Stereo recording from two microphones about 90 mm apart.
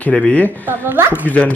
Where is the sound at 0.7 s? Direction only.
25° right (ahead or behind).